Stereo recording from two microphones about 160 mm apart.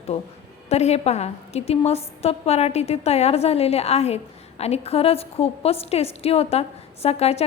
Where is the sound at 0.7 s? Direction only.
40° left (ahead or behind).